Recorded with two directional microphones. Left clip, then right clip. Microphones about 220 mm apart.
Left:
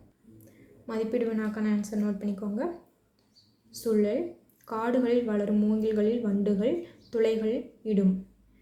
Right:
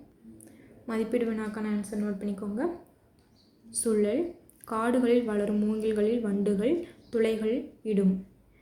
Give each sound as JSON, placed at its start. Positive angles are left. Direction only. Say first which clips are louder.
{"t": 0.9, "sound": "a woman's voice", "louder": "even", "side_deg": -15}
{"t": 3.7, "sound": "a woman's voice", "louder": "even", "side_deg": -15}